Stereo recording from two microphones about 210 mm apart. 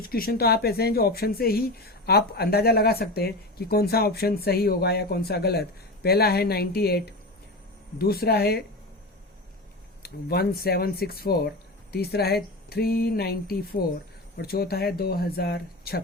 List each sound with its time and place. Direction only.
0.0 s speech: 45° left (ahead or behind)
10.0 s speech: 50° left (ahead or behind)